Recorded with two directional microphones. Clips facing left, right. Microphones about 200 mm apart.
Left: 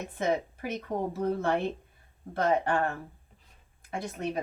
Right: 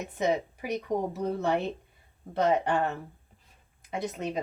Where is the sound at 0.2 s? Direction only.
15° right (ahead or behind).